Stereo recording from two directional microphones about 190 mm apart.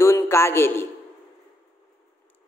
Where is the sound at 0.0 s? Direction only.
15° left (ahead or behind).